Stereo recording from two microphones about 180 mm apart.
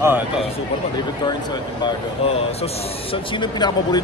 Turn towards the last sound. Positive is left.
turn(degrees=25)  # may be behind; listen again after turning